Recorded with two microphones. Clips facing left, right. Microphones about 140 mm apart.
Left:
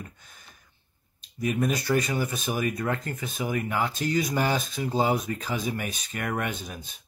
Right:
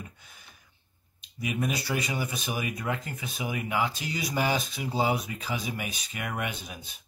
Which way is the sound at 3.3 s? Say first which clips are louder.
Left 3 dB; 45° left (ahead or behind).